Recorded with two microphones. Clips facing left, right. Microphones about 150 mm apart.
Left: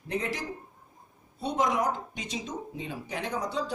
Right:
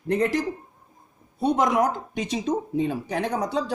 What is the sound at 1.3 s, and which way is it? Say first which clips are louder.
Speech: right 7 dB; 65° right (ahead or behind).